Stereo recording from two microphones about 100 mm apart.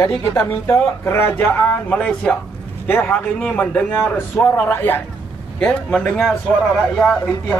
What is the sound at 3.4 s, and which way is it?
Speech, 10° left (ahead or behind).